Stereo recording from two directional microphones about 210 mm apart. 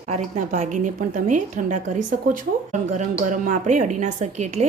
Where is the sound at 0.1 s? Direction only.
35° right (ahead or behind).